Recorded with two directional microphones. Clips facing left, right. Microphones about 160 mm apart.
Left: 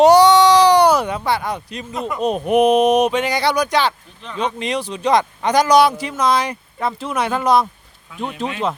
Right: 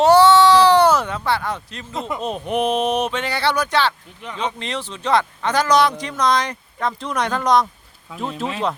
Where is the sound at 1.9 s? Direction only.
25° right (ahead or behind).